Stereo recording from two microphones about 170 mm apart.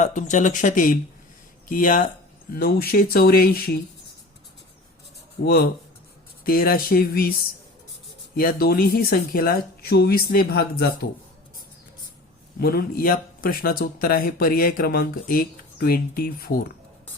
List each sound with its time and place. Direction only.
0.0 s speech: 45° left (ahead or behind); by 3.8 s 60° left (ahead or behind)
5.4 s speech: 65° left (ahead or behind)
8.4 s speech: 60° left (ahead or behind)
12.5 s speech: 60° left (ahead or behind)